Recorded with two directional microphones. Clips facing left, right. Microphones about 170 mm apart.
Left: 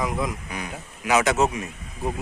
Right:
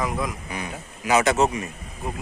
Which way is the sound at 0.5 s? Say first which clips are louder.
Right 1 dB; centre (ahead or behind).